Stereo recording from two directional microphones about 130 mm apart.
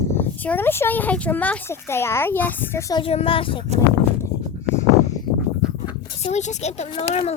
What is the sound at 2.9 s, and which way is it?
Speech, 45° left (ahead or behind).